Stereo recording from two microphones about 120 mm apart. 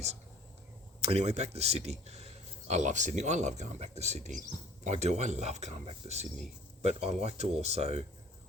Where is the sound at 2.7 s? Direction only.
80° right.